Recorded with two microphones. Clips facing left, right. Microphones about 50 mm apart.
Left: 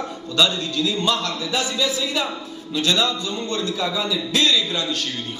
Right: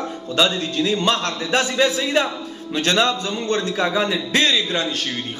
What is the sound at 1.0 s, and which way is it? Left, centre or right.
A man's voice, right.